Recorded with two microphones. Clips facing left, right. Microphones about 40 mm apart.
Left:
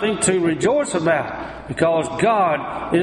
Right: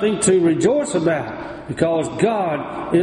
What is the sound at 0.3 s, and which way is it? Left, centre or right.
A man's voice, left.